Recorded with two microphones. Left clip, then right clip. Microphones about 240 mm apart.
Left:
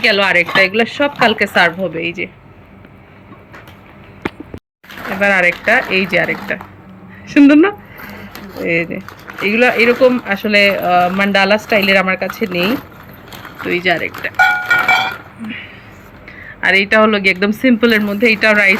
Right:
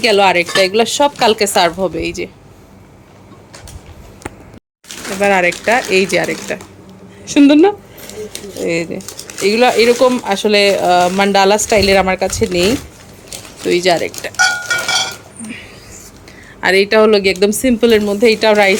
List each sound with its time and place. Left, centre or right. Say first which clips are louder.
0.0 s speech: right 1 dB; centre
5.0 s speech: even; centre
15.4 s a sound: left 3 dB; centre
16.6 s speech: even; centre